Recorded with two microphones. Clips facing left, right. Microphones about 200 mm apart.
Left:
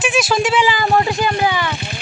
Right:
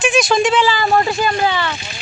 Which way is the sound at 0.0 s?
5° left (ahead or behind).